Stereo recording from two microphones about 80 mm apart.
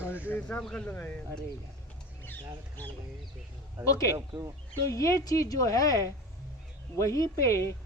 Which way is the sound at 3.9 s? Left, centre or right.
Left.